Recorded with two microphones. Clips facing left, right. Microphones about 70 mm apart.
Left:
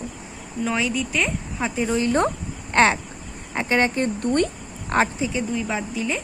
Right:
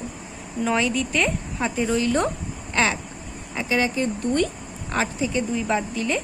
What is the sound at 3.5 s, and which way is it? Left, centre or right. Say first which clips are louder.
Speech: left 2 dB; left.